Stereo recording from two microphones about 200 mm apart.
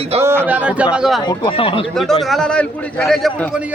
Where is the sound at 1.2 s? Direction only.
20° left (ahead or behind).